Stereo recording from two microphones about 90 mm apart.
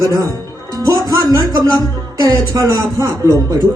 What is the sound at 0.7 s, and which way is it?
Music, 35° right (ahead or behind).